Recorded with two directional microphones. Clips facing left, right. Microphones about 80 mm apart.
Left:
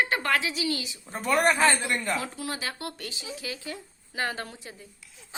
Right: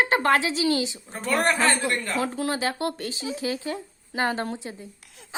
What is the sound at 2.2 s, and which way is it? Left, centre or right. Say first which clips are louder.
A woman's voice: right 8 dB; right.